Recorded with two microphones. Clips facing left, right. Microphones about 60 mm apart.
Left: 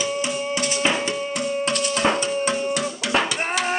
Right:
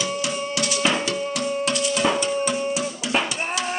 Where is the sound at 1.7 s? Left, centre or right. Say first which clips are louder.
Even; left.